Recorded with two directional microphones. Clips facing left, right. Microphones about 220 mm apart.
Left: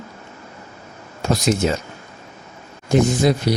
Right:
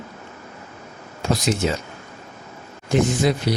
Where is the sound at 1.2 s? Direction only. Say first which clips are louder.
Left 2 dB; 45° left (ahead or behind).